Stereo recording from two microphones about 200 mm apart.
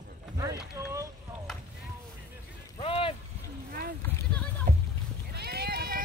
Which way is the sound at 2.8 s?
30° left (ahead or behind).